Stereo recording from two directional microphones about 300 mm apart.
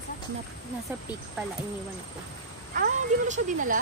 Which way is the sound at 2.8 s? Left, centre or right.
Right.